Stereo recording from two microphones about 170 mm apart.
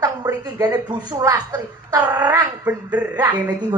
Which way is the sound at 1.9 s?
10° right (ahead or behind).